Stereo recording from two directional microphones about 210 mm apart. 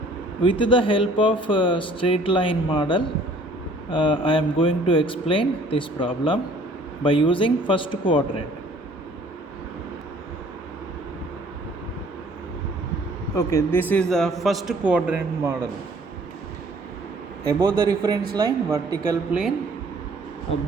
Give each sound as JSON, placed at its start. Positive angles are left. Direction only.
{"t": 0.4, "sound": "speech", "side_deg": 25}
{"t": 13.3, "sound": "a man's voice", "side_deg": 15}
{"t": 17.4, "sound": "a man's voice", "side_deg": -15}
{"t": 19.3, "sound": "a man's voice", "side_deg": -5}